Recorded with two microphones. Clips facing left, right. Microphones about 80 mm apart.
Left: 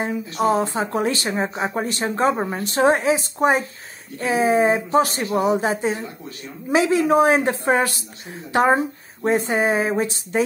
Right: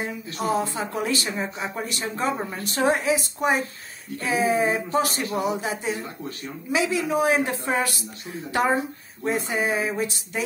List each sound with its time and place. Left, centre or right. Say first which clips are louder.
0.0 s speech: left 7 dB; left